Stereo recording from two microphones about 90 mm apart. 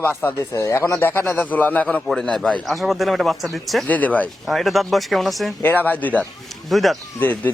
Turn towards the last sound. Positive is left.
turn(degrees=20)  # may be behind; listen again after turning